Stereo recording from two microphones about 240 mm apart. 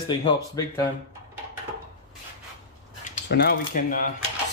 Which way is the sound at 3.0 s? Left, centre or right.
Left.